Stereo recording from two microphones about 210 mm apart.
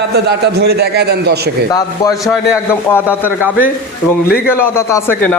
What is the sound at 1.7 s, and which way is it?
A man's voice, 15° left (ahead or behind).